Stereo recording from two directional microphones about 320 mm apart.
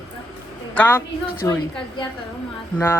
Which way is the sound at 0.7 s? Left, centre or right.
Centre.